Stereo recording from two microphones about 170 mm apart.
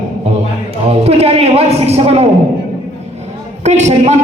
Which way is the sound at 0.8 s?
35° right (ahead or behind).